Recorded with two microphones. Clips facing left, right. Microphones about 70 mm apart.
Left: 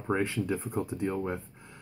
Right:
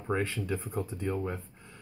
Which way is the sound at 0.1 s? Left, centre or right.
Centre.